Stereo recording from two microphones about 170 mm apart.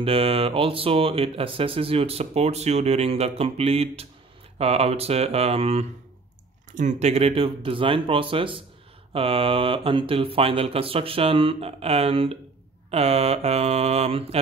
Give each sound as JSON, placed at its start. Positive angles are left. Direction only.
{"t": 0.0, "sound": "speech", "side_deg": -35}